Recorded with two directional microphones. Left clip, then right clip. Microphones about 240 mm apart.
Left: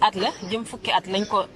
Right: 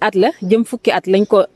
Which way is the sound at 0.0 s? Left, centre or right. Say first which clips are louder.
Right 6 dB; right.